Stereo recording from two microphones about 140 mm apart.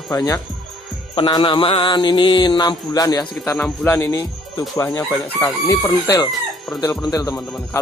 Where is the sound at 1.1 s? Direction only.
30° left (ahead or behind).